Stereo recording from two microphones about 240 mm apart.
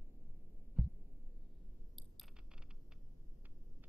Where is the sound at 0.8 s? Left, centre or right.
Centre.